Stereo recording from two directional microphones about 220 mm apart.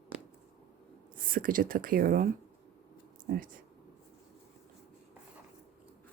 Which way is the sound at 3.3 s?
45° right (ahead or behind).